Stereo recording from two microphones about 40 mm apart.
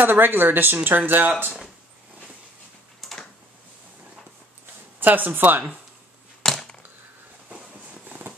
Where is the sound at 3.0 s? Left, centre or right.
Centre.